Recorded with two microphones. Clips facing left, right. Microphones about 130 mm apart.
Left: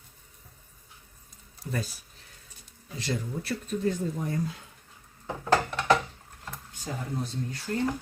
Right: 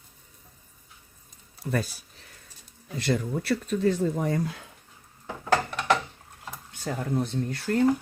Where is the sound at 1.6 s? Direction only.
65° right (ahead or behind).